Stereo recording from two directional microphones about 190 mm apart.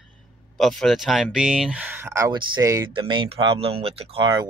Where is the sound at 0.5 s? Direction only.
Centre (ahead or behind).